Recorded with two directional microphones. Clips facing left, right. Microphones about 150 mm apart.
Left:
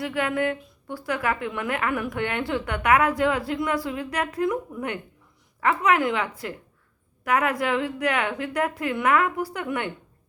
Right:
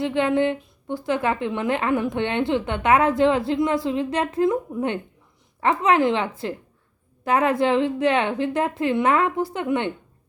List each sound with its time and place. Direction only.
0.0 s a woman's voice: 25° right (ahead or behind)